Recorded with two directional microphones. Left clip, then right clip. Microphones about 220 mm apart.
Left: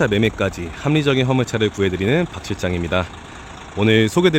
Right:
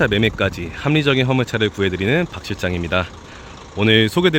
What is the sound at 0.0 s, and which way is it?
Speech, centre (ahead or behind).